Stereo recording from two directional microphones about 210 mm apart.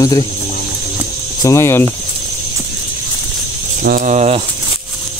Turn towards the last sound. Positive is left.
turn(degrees=-30)  # may be behind; listen again after turning